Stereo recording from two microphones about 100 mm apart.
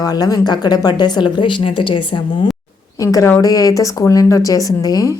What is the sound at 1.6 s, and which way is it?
Speech, 60° left (ahead or behind).